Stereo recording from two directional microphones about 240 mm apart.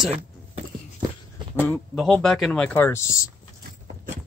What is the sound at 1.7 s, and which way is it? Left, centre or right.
Speech, centre.